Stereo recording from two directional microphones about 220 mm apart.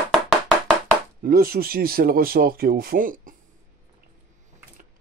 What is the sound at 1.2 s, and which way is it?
Speech, 40° right (ahead or behind).